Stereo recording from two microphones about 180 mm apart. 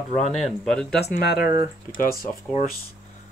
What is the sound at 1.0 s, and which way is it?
Speech, 60° left (ahead or behind).